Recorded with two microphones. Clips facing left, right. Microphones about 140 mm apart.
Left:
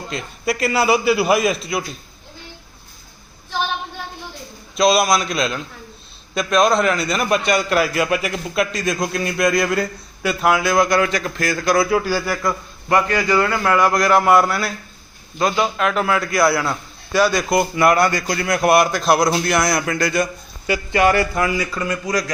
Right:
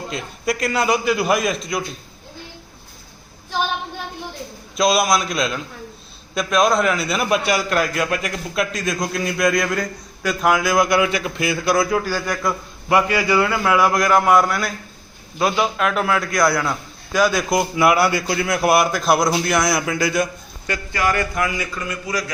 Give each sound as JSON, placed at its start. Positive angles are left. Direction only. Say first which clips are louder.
{"t": 0.1, "sound": "a man's voice", "louder": "left 1 dB", "side_deg": 0}
{"t": 4.8, "sound": "a man's voice", "louder": "left 2 dB", "side_deg": 0}
{"t": 20.9, "sound": "speech", "louder": "left 5 dB", "side_deg": 25}